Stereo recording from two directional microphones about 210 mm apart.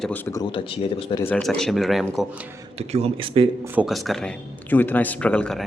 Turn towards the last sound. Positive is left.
turn(degrees=5)  # may be behind; listen again after turning